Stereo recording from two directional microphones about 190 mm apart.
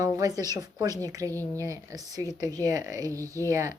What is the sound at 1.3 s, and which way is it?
Speech, 10° left (ahead or behind).